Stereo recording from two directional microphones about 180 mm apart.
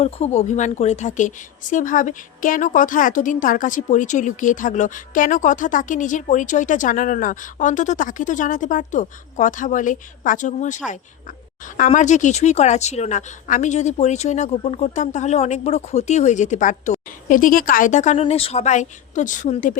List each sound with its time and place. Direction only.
0.0 s a woman's voice: 35° left (ahead or behind)